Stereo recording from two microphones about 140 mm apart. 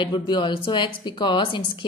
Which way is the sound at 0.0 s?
35° left (ahead or behind).